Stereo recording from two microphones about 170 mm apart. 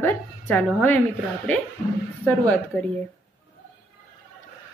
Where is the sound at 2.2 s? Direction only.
10° left (ahead or behind).